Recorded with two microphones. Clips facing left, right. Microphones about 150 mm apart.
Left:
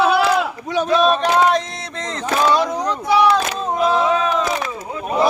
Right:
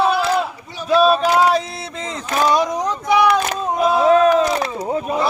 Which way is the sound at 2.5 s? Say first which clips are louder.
Even; 20° right (ahead or behind).